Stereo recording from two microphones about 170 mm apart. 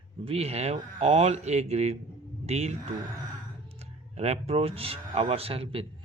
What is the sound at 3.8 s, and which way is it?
Speech, 40° right (ahead or behind).